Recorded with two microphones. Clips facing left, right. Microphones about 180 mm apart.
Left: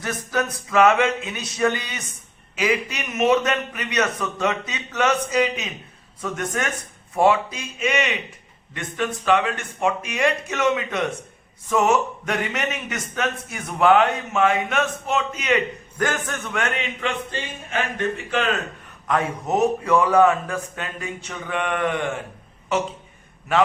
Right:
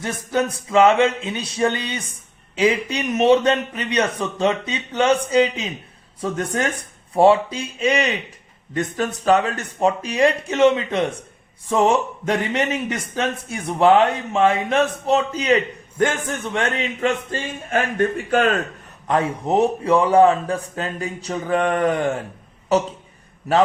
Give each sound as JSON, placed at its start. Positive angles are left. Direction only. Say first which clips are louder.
{"t": 0.0, "sound": "a man's voice", "louder": "right 3 dB", "side_deg": -25}
{"t": 19.0, "sound": "a man's voice", "louder": "right 3 dB", "side_deg": -30}